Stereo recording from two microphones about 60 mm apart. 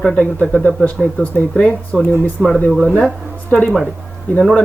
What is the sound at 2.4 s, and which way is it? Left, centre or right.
Speech, centre.